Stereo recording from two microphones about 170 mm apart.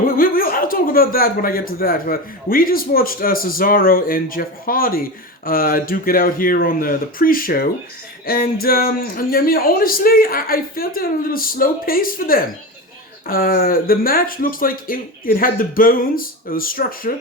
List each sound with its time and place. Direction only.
0.2 s speech: 60° left (ahead or behind)